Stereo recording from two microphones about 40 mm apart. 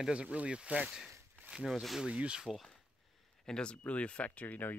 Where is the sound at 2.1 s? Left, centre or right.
Right.